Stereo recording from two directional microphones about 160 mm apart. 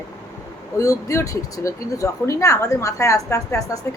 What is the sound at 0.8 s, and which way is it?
Speech, 20° left (ahead or behind).